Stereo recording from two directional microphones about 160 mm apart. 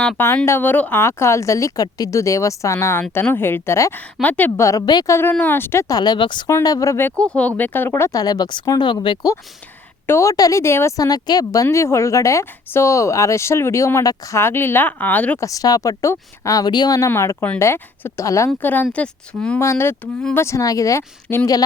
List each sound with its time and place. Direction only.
0.2 s speech: 15° left (ahead or behind)
15.4 s speech: 20° left (ahead or behind); by 19.5 s 5° left (ahead or behind)
19.5 s speech: 15° left (ahead or behind)